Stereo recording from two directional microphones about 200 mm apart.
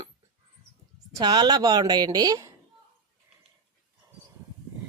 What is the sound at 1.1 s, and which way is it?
A woman's voice, 20° right (ahead or behind).